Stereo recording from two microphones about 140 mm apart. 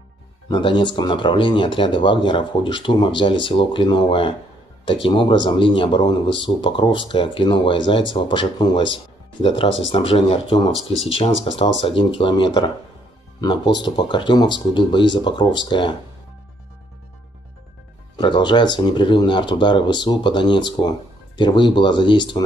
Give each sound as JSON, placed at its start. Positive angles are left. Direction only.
{"t": 0.5, "sound": "speech", "side_deg": 35}
{"t": 10.7, "sound": "speech", "side_deg": 0}
{"t": 11.1, "sound": "speech", "side_deg": 45}
{"t": 18.1, "sound": "speech", "side_deg": 35}